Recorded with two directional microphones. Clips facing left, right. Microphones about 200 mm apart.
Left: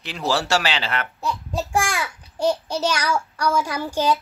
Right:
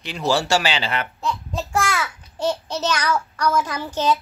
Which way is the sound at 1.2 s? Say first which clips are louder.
Even; 10° left (ahead or behind).